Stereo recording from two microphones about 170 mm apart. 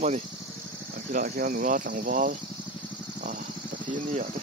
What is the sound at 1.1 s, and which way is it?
Speech, 55° right (ahead or behind).